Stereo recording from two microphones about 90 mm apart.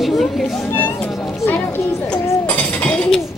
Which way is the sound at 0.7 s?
20° left (ahead or behind).